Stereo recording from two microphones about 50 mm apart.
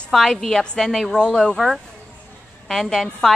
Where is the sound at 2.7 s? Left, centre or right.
Centre.